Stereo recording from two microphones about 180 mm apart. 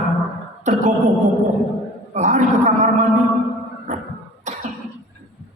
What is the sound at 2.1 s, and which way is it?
Speech, 40° right (ahead or behind).